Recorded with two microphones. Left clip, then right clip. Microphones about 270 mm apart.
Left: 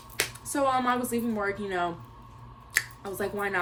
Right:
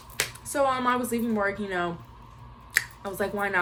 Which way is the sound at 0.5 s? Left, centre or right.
Centre.